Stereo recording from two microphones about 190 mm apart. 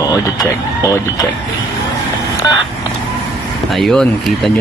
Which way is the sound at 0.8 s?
15° left (ahead or behind).